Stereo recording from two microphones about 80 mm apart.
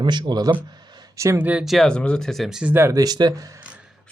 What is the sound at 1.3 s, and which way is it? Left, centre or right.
Speech, centre.